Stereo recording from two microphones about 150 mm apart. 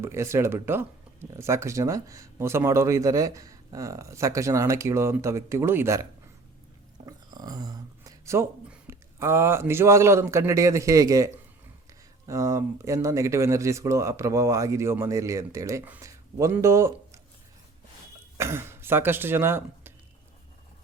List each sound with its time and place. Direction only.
0.0 s speech: 20° right (ahead or behind)
7.0 s a sound: 25° right (ahead or behind)
8.9 s a man's voice: 15° right (ahead or behind)
18.3 s speech: 15° right (ahead or behind)